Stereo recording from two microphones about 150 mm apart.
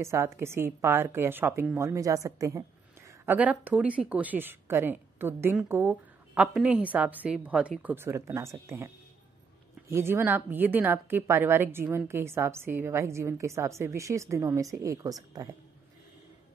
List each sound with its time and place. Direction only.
0.0 s a woman's voice: 20° right (ahead or behind)